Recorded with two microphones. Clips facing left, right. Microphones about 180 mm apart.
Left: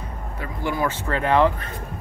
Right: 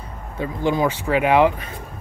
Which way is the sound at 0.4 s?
20° right (ahead or behind).